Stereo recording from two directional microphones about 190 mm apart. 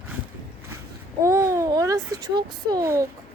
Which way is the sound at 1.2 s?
15° right (ahead or behind).